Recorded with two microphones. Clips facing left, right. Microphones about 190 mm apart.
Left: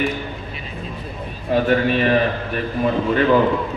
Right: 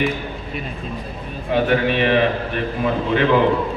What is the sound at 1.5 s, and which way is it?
Speech, 40° left (ahead or behind).